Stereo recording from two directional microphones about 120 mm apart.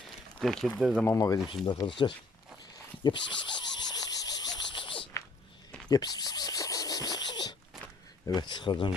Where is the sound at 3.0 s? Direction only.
40° left (ahead or behind).